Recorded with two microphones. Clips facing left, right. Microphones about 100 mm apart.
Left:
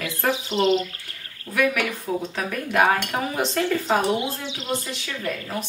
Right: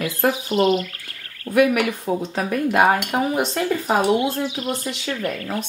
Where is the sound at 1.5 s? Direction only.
20° right (ahead or behind).